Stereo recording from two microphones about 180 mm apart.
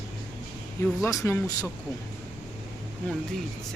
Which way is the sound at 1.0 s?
15° left (ahead or behind).